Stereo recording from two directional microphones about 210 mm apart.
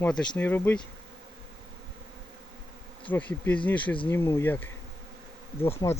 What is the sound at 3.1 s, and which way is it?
Speech, 10° left (ahead or behind).